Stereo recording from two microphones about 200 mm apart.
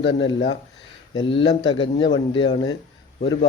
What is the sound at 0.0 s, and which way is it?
Speech, 65° left (ahead or behind).